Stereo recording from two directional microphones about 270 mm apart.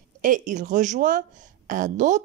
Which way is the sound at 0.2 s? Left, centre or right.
Right.